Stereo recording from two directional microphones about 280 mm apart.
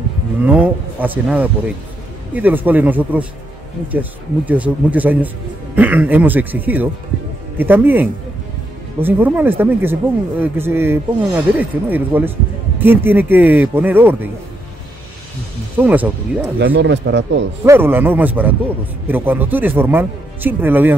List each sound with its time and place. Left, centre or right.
0.4 s speech: centre
15.8 s speech: centre
16.5 s a man's voice: right
17.6 s speech: centre